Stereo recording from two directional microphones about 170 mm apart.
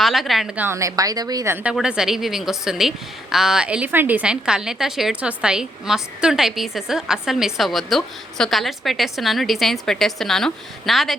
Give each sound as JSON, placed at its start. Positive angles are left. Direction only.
{"t": 0.0, "sound": "a woman's voice", "side_deg": 0}
{"t": 1.6, "sound": "a woman's voice", "side_deg": -5}